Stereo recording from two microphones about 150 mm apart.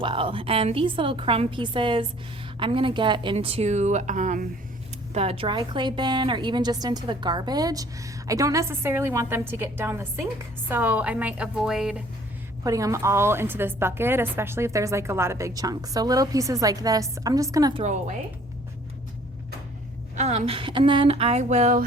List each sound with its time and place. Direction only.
0.0 s a woman's voice: 35° right (ahead or behind); by 4.4 s 55° right (ahead or behind)
5.1 s a woman's voice: 40° right (ahead or behind); by 12.0 s 5° right (ahead or behind)
12.6 s a woman's voice: 20° right (ahead or behind)
20.1 s a woman's voice: 50° right (ahead or behind)